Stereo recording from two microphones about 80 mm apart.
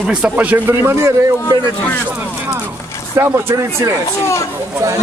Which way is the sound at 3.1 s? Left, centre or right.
Right.